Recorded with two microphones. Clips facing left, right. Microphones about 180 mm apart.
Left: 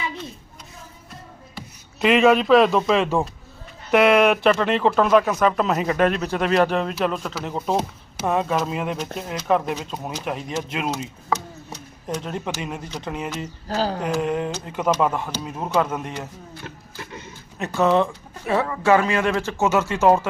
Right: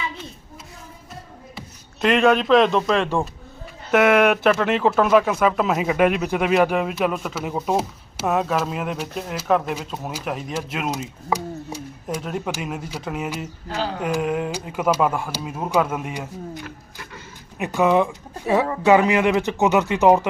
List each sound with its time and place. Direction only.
1.5 s speech: centre (ahead or behind)
13.7 s speech: 35° left (ahead or behind)
14.0 s speech: 5° right (ahead or behind)
16.6 s a sound: 20° left (ahead or behind)
17.6 s speech: 15° right (ahead or behind)